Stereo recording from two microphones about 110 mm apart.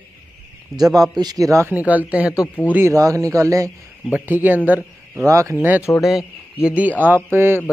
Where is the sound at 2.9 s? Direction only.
30° right (ahead or behind).